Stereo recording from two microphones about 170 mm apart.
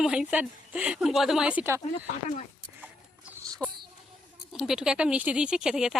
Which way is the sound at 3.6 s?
5° left (ahead or behind).